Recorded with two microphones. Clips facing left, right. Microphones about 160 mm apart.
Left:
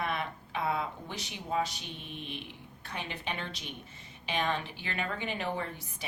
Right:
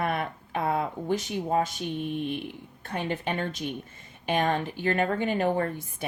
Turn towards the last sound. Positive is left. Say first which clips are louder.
# right 9 dB
turn(degrees=-50)  # may be behind; listen again after turning